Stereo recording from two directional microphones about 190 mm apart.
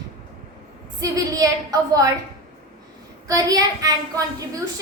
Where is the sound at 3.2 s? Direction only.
20° right (ahead or behind).